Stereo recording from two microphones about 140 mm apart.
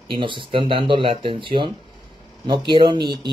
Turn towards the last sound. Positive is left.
turn(degrees=-30)  # may be behind; listen again after turning